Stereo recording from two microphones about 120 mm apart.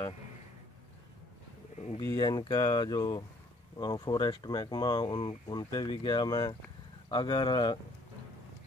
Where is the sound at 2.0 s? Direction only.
35° left (ahead or behind).